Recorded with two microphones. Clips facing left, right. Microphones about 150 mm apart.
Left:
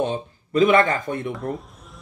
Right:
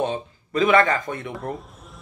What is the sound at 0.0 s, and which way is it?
Speech, 40° left (ahead or behind).